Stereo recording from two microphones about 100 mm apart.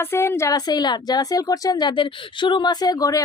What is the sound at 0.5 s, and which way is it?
A woman's voice, 45° left (ahead or behind).